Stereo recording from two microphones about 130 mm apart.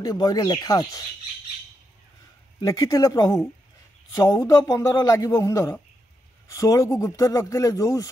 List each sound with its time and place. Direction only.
0.0 s speech: 30° left (ahead or behind)
2.6 s speech: 30° left (ahead or behind)